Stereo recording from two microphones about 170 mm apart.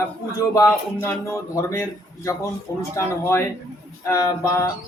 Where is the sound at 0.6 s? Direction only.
15° left (ahead or behind).